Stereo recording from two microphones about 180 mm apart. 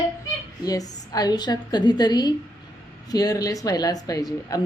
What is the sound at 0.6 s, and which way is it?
A woman's voice, 20° left (ahead or behind).